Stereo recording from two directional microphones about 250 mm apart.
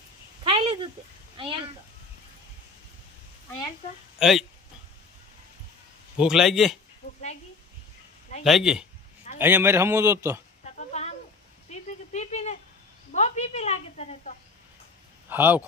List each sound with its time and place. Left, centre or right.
0.4 s a sound: right
1.4 s speech: right
4.2 s a man's voice: centre
6.1 s a man's voice: centre
7.0 s a sound: left
8.4 s a man's voice: centre
11.7 s a sound: left
13.1 s speech: left
15.3 s a man's voice: centre